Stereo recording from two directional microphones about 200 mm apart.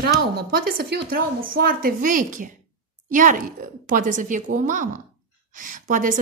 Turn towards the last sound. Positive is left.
turn(degrees=-40)  # may be behind; listen again after turning